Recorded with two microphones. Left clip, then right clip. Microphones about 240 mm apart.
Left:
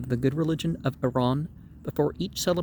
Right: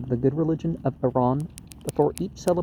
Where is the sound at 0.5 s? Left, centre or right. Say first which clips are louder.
Right 2 dB; left.